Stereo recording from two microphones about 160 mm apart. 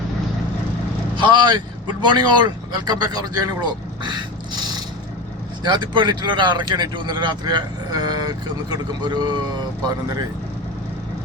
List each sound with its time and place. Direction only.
1.1 s speech: 30° right (ahead or behind)